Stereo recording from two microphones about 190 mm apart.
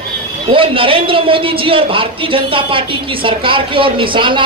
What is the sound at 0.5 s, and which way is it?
A man's voice, 30° right (ahead or behind).